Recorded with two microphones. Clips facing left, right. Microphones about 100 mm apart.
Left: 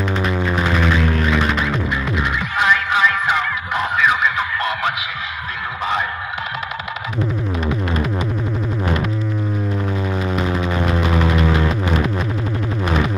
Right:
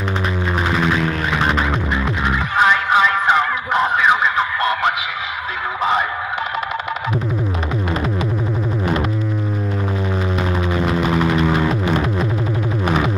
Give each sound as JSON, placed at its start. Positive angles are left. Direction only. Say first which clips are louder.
{"t": 2.0, "sound": "music", "louder": "right 1 dB", "side_deg": -25}
{"t": 4.6, "sound": "music", "louder": "right 3 dB", "side_deg": -5}
{"t": 9.9, "sound": "a sound", "louder": "even", "side_deg": 0}